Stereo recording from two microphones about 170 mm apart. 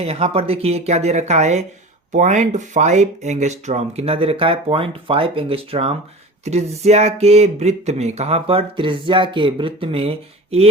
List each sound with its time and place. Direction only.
0.0 s speech: 35° right (ahead or behind)